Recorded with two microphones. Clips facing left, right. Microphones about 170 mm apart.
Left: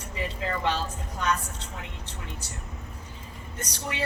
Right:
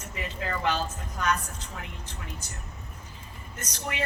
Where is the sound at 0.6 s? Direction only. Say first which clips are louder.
Right 3 dB; 30° left (ahead or behind).